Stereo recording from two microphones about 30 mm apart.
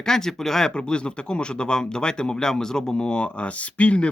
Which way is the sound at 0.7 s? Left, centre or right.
Left.